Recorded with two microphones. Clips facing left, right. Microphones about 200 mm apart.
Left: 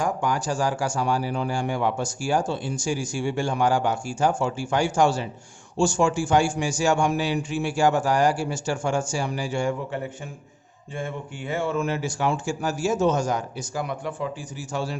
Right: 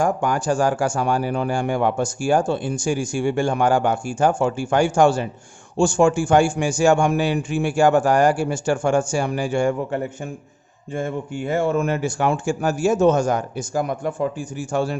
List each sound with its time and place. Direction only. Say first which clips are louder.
0.0 s speech: right 5 dB; 50° right (ahead or behind)